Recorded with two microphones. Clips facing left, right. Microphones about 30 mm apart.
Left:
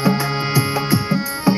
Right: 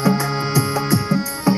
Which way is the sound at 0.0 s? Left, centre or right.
Centre.